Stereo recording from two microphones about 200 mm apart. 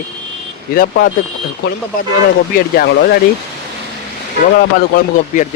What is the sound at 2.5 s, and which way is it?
Speech, 50° left (ahead or behind).